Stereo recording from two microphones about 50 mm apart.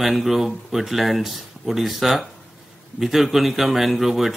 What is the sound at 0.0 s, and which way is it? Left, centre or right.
A man's voice, centre.